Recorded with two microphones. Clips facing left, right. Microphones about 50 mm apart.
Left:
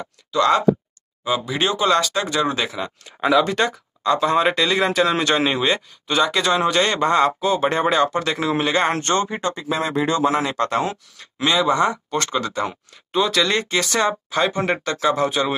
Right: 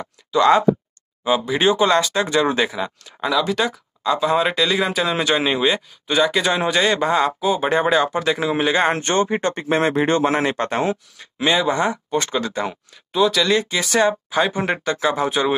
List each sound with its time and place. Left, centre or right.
0.0 s speech: centre
3.1 s speech: centre
13.1 s speech: centre